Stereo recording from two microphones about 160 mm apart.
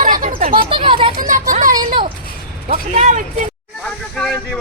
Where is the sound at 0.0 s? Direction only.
55° right (ahead or behind).